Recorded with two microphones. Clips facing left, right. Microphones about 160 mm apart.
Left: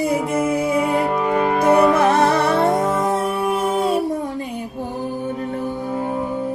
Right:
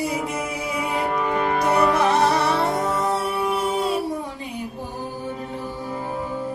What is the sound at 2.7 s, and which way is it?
Music, 25° left (ahead or behind).